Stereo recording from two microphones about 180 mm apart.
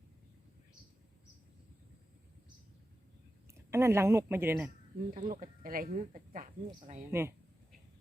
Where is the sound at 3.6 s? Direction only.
15° right (ahead or behind).